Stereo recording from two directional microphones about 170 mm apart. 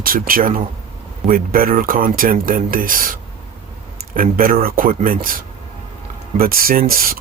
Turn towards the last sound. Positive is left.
turn(degrees=-55)  # may be behind; listen again after turning